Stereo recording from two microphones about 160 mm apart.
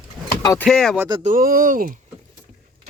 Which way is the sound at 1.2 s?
60° right (ahead or behind).